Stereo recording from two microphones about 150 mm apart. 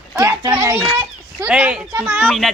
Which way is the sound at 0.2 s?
20° right (ahead or behind).